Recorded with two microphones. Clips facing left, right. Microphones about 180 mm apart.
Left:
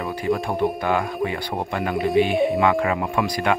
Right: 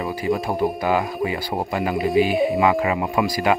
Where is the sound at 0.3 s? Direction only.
5° right (ahead or behind).